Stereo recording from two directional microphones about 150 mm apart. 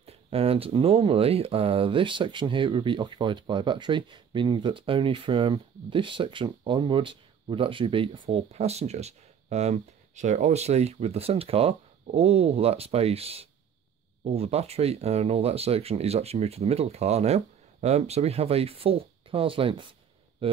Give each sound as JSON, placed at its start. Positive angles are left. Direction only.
{"t": 0.0, "sound": "speech", "side_deg": -40}